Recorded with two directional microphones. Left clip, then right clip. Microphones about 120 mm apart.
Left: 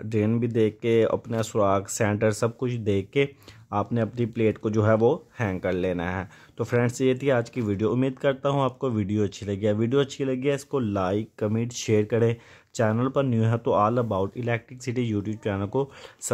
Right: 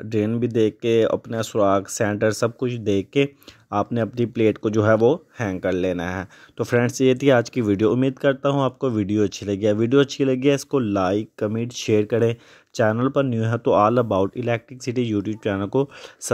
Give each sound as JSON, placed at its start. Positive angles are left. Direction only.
{"t": 0.1, "sound": "speech", "side_deg": -30}
{"t": 13.7, "sound": "speech", "side_deg": -55}